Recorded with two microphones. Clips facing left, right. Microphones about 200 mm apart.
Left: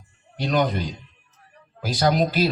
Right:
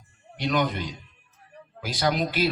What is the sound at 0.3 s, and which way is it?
Speech, 35° left (ahead or behind).